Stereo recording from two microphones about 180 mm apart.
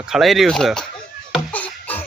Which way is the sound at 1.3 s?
10° left (ahead or behind).